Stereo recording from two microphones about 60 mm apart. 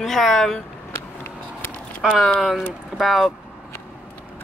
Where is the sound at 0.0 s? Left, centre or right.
Centre.